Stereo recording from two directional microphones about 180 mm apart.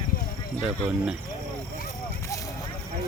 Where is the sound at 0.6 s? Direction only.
5° right (ahead or behind).